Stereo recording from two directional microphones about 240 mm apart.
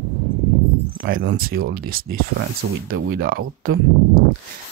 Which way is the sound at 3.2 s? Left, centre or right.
Right.